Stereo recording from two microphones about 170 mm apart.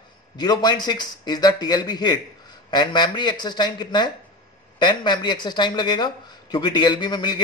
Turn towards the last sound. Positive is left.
turn(degrees=25)  # may be behind; listen again after turning